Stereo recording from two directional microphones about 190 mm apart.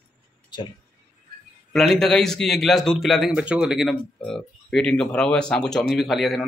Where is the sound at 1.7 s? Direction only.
Centre (ahead or behind).